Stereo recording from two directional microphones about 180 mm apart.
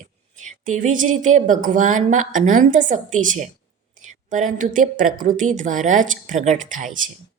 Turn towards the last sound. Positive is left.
turn(degrees=-45)  # may be behind; listen again after turning